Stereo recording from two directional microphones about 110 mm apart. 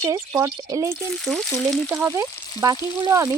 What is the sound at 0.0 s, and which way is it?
Frying, 30° right (ahead or behind).